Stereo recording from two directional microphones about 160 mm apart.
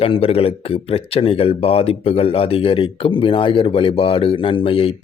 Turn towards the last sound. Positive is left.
turn(degrees=35)  # may be behind; listen again after turning